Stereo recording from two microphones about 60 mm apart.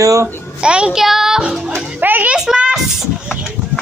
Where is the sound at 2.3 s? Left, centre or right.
Centre.